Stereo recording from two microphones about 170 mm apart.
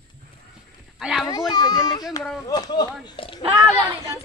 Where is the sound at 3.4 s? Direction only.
30° right (ahead or behind).